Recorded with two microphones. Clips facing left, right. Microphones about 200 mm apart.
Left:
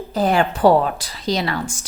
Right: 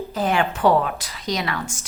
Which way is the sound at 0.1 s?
35° left (ahead or behind).